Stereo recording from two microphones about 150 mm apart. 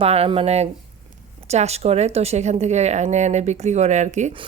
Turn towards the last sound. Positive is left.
turn(degrees=-50)  # may be behind; listen again after turning